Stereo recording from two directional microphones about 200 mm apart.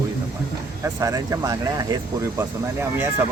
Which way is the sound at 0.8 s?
15° right (ahead or behind).